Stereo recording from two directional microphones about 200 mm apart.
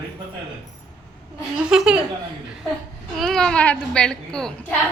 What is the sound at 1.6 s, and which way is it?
Speech, 5° right (ahead or behind).